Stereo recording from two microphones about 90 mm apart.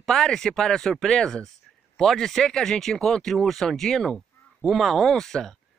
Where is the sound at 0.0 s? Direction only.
5° left (ahead or behind).